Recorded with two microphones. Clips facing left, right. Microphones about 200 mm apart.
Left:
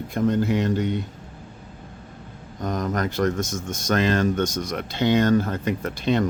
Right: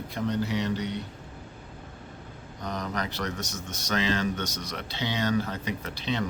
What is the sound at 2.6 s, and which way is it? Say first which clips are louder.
Speech: left 7 dB; 45° left (ahead or behind).